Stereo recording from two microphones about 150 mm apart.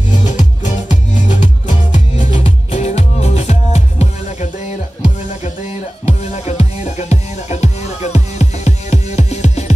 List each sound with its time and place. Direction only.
0.1 s music: 55° left (ahead or behind)
2.3 s music: 40° left (ahead or behind)
6.0 s music: 45° left (ahead or behind)